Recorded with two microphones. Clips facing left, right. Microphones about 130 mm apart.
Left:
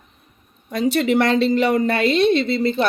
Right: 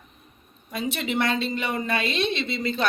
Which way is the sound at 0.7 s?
80° left.